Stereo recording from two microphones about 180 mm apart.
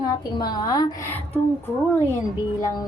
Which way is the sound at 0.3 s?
20° left (ahead or behind).